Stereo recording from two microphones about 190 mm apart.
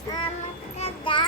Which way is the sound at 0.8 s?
25° left (ahead or behind).